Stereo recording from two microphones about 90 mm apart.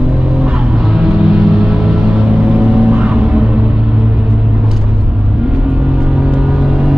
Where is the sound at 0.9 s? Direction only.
10° right (ahead or behind).